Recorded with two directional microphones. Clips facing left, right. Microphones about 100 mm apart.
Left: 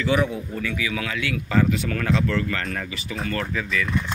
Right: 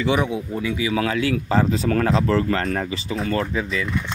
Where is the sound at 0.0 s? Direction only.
15° right (ahead or behind).